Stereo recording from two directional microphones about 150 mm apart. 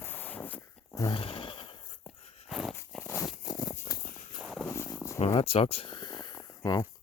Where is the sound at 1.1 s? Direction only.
35° left (ahead or behind).